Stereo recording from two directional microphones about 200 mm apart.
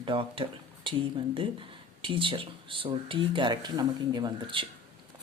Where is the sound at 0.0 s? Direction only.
25° right (ahead or behind).